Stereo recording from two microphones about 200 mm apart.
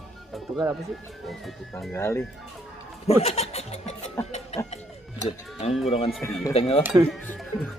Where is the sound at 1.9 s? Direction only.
15° left (ahead or behind).